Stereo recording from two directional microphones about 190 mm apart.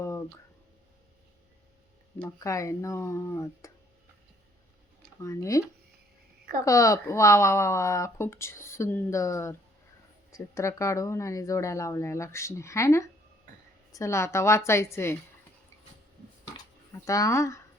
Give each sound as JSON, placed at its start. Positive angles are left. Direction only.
{"t": 0.0, "sound": "a sound", "side_deg": 15}
{"t": 2.1, "sound": "speech", "side_deg": 15}
{"t": 5.2, "sound": "speech", "side_deg": 15}
{"t": 6.7, "sound": "speech", "side_deg": 15}
{"t": 16.9, "sound": "speech", "side_deg": 15}